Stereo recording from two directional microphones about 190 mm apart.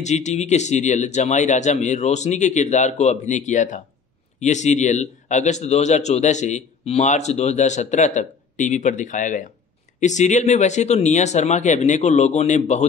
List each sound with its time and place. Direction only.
0.0 s speech: 35° left (ahead or behind)